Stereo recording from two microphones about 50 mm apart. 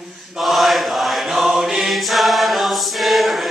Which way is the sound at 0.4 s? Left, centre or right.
Centre.